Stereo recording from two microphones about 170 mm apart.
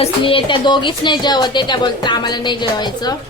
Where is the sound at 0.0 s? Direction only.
30° left (ahead or behind).